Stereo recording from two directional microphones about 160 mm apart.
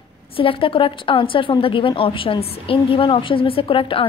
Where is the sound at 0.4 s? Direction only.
35° left (ahead or behind).